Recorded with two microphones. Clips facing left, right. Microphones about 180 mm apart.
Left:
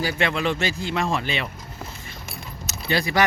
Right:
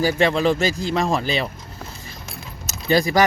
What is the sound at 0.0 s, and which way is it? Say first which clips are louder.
Speech: right 6 dB; 40° right (ahead or behind).